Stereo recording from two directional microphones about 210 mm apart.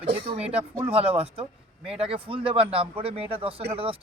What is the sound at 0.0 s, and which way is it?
Speech, 25° right (ahead or behind).